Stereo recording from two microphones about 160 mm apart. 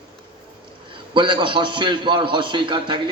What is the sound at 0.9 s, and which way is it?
A man's voice, 30° right (ahead or behind).